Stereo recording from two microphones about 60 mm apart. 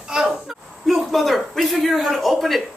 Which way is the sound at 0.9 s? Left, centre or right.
Centre.